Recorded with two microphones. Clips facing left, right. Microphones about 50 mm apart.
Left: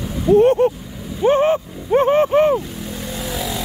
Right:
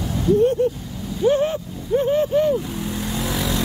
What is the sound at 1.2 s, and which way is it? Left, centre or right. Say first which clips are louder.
Speech: left 4 dB; left.